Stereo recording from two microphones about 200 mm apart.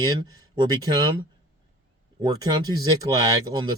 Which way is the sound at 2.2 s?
20° right (ahead or behind).